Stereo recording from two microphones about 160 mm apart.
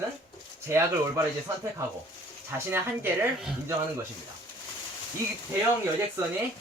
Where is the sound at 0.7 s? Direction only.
15° right (ahead or behind).